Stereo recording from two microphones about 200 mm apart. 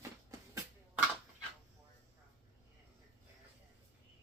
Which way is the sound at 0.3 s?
15° right (ahead or behind).